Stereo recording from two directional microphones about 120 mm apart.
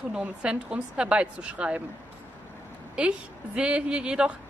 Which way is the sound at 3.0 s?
10° right (ahead or behind).